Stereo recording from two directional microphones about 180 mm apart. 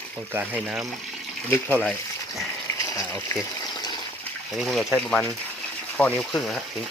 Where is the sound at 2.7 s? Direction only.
20° left (ahead or behind).